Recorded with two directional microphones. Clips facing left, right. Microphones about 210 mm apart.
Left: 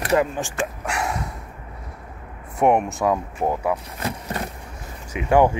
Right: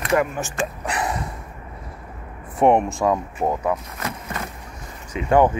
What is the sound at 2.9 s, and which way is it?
Speech, centre (ahead or behind).